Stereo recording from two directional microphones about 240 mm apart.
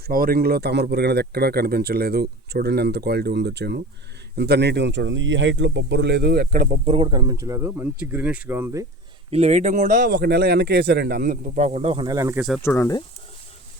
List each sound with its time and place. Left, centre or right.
0.1 s speech: right; by 8.9 s centre
9.3 s speech: right
12.6 s speech: centre